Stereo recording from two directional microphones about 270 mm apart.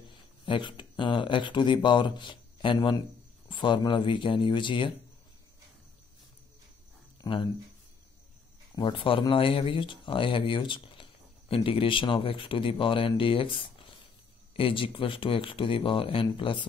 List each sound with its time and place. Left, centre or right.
0.5 s speech: centre
7.2 s speech: centre
8.7 s speech: centre